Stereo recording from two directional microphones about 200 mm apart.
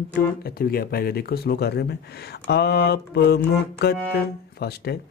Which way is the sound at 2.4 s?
55° left (ahead or behind).